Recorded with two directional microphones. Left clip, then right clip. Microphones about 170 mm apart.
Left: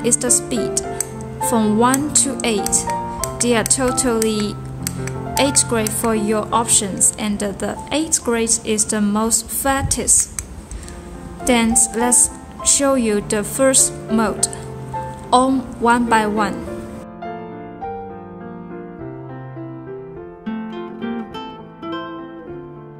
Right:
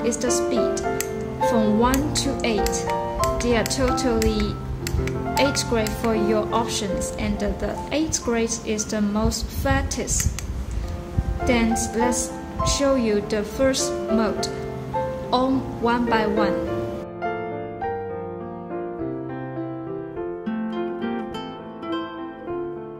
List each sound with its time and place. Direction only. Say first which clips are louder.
0.0 s a woman's voice: left 2 dB; 40° left (ahead or behind)
5.4 s a woman's voice: left 4 dB; 40° left (ahead or behind)
11.4 s a woman's voice: left 5 dB; 40° left (ahead or behind)
20.4 s guitar: right 1 dB; 10° left (ahead or behind)